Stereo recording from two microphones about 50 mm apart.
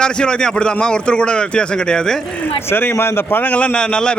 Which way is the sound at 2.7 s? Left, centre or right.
Left.